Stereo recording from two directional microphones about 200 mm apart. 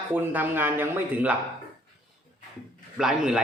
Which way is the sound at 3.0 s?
5° right (ahead or behind).